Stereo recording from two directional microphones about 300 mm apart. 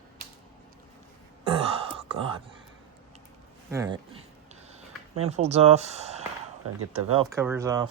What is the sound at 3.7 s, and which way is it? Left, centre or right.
Speech, centre.